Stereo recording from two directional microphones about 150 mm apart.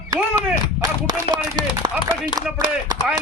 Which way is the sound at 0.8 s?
25° right (ahead or behind).